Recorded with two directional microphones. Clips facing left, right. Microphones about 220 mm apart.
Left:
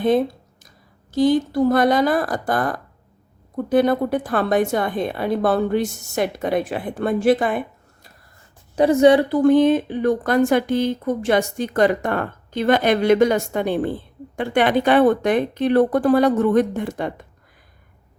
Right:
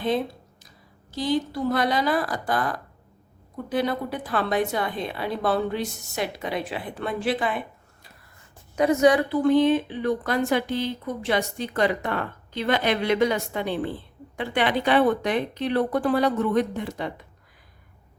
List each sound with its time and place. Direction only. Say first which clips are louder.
1.1 s speech: left 8 dB; 50° left (ahead or behind)
8.7 s a woman's voice: left 5 dB; 30° left (ahead or behind)
9.3 s speech: left 5 dB; 45° left (ahead or behind)